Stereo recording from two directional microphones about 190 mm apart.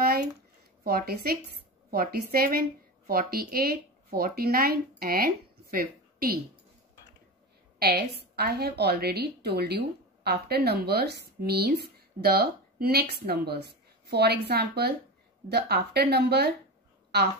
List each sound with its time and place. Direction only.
0.0 s a sound: 55° right (ahead or behind)
0.8 s speech: 55° right (ahead or behind)
7.8 s a woman's voice: 55° right (ahead or behind)